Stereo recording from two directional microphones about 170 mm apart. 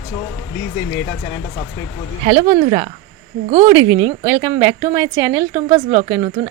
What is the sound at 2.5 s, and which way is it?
A woman's voice, 30° right (ahead or behind).